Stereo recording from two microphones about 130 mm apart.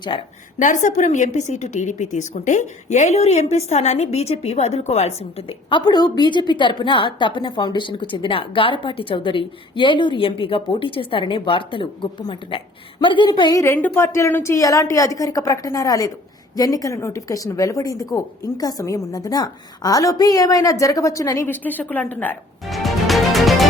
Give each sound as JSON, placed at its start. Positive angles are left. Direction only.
{"t": 0.1, "sound": "a woman's voice", "side_deg": 40}
{"t": 0.6, "sound": "a woman's voice", "side_deg": 75}
{"t": 13.7, "sound": "a woman's voice", "side_deg": 15}
{"t": 22.7, "sound": "music", "side_deg": 0}